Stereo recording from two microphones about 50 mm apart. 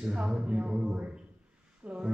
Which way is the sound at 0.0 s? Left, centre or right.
Centre.